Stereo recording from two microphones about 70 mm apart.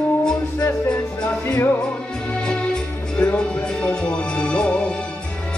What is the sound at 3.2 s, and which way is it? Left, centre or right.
Music, centre.